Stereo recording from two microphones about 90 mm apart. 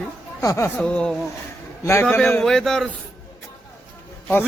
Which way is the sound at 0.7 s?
10° left (ahead or behind).